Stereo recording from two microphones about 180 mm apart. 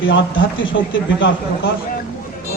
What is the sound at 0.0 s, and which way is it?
Speech, 90° left.